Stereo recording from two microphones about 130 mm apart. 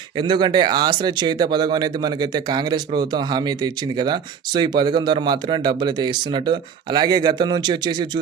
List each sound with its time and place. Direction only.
0.2 s speech: 35° right (ahead or behind)